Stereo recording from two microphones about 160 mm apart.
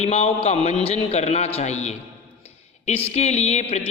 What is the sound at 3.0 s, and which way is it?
Speech, 45° left (ahead or behind).